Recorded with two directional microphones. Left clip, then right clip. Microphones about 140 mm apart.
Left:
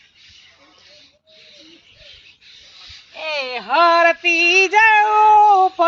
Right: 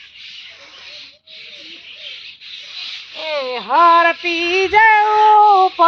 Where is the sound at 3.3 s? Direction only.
20° left (ahead or behind).